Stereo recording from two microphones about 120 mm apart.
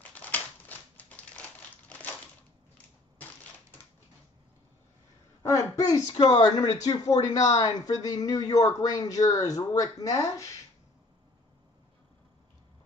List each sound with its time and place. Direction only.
0.1 s crumpling: 15° left (ahead or behind)
1.9 s a sound: 15° left (ahead or behind)
5.4 s speech: 25° left (ahead or behind)